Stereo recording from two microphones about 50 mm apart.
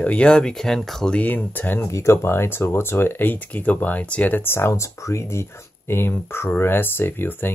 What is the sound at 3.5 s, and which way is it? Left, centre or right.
Speech, left.